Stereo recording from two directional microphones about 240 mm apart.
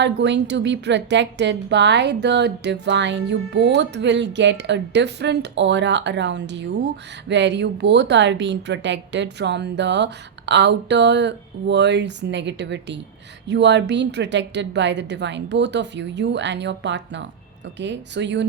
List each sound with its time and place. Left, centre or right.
0.0 s a woman's voice: right